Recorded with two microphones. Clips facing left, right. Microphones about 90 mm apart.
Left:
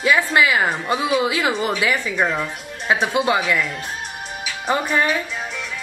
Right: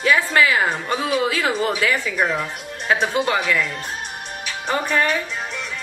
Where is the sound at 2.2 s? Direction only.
Centre (ahead or behind).